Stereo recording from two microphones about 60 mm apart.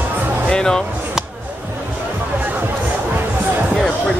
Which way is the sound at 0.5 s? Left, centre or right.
Centre.